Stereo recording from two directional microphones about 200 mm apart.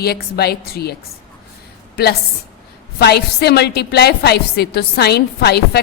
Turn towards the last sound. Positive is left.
turn(degrees=55)  # may be behind; listen again after turning